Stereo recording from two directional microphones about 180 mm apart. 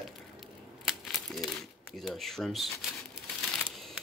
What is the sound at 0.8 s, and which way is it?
Crumpling, centre (ahead or behind).